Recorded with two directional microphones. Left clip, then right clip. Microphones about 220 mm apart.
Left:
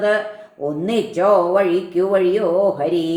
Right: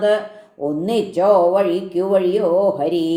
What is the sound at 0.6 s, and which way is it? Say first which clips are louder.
Speech: right 1 dB; 30° right (ahead or behind).